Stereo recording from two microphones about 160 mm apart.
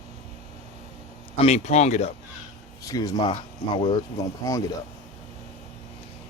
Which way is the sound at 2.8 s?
20° left (ahead or behind).